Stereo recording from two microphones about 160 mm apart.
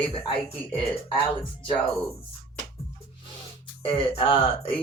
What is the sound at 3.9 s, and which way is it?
Speech, 35° left (ahead or behind).